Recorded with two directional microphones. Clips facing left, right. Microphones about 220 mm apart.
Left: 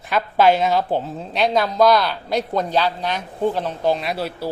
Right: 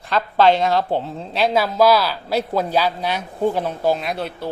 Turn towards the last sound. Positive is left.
turn(degrees=5)  # may be behind; listen again after turning